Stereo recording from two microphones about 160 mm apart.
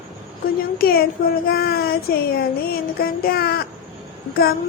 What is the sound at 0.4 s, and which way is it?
A woman's voice, 65° left (ahead or behind).